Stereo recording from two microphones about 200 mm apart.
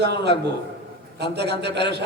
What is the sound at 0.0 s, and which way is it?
A man's voice, 55° right (ahead or behind).